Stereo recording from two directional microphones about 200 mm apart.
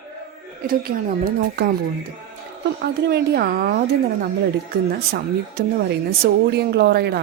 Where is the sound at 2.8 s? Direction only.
55° right (ahead or behind).